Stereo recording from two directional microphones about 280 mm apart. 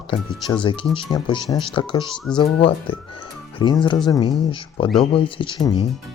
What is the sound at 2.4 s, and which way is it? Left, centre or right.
Speech, centre.